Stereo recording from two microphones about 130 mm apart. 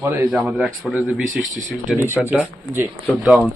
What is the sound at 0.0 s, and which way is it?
Speech, 15° right (ahead or behind).